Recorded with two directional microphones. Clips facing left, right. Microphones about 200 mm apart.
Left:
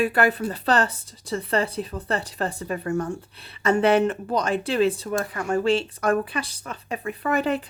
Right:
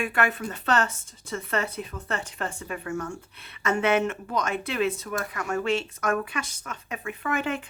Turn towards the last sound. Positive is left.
turn(degrees=35)  # may be behind; listen again after turning